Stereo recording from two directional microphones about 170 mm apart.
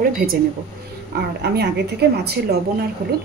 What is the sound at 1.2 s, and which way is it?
Speech, 75° right (ahead or behind).